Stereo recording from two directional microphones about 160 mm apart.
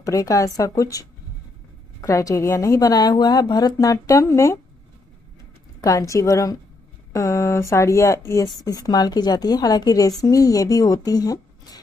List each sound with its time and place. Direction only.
0.0 s a woman's voice: 20° left (ahead or behind)
5.8 s a woman's voice: 20° left (ahead or behind)
7.1 s a sound: 20° left (ahead or behind)
7.7 s a woman's voice: 20° left (ahead or behind)